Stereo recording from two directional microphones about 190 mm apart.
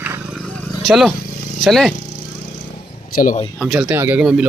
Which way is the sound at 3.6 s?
5° right (ahead or behind).